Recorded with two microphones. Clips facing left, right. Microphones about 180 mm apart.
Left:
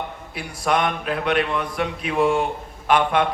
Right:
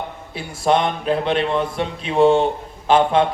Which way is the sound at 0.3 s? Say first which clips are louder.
Right 4 dB; 25° right (ahead or behind).